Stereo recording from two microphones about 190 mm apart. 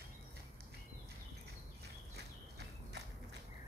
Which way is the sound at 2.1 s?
60° right (ahead or behind).